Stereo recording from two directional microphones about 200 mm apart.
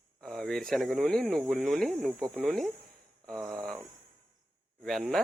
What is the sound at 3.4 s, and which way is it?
Speech, 20° right (ahead or behind).